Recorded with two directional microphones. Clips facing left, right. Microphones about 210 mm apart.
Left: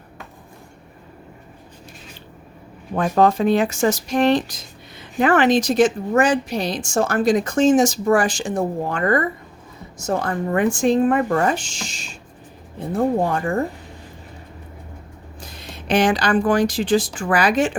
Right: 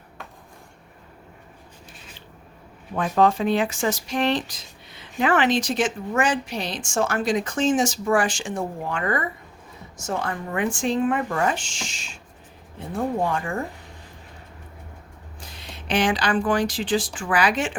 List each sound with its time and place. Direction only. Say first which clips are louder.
2.9 s speech: left 3 dB; 45° left (ahead or behind)
15.4 s speech: left 4 dB; 45° left (ahead or behind)